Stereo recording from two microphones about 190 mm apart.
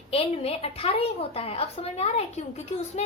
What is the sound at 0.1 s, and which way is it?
A woman's voice, 30° left (ahead or behind).